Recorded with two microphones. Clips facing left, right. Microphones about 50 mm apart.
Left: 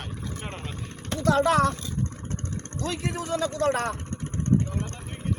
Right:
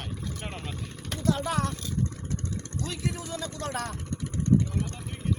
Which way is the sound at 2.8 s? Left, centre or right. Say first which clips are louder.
Left 4 dB; left.